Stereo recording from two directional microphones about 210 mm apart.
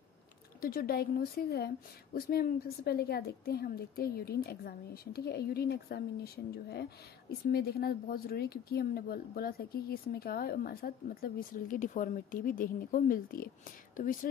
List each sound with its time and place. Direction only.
0.6 s a woman's voice: 45° left (ahead or behind)